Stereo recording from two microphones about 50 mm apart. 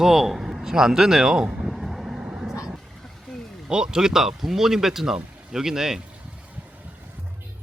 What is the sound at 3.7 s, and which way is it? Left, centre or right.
Speech, centre.